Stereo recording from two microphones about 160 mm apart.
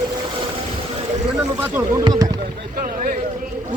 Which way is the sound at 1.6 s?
15° right (ahead or behind).